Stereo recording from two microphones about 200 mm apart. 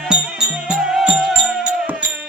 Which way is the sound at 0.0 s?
5° right (ahead or behind).